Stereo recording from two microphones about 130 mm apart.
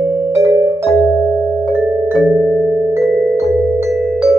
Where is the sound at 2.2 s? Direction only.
20° right (ahead or behind).